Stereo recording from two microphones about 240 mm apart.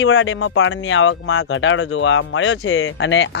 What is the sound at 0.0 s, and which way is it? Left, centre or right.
Speech, left.